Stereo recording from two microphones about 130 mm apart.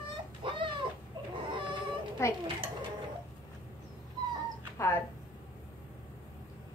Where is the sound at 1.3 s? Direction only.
40° right (ahead or behind).